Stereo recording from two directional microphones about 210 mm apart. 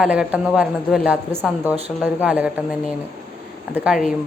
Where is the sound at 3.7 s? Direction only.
5° right (ahead or behind).